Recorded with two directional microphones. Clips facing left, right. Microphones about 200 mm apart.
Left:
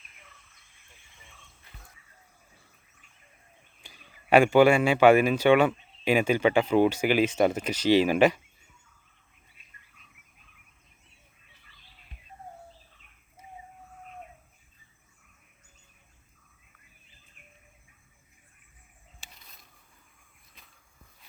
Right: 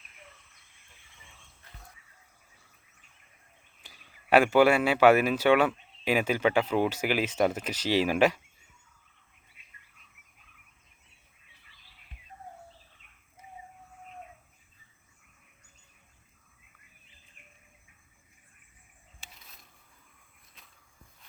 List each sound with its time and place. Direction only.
3.8 s speech: 5° right (ahead or behind)
19.2 s a sound: centre (ahead or behind)
20.6 s walk: centre (ahead or behind)